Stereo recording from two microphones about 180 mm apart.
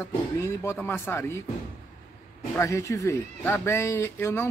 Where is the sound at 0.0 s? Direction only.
15° left (ahead or behind).